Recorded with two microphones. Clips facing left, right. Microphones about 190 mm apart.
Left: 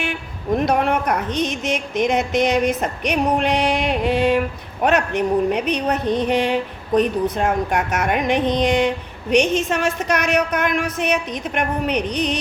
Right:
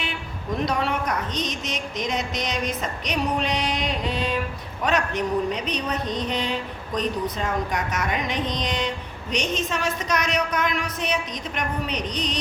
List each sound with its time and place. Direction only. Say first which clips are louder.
0.0 s a woman's voice: left 5 dB; 55° left (ahead or behind)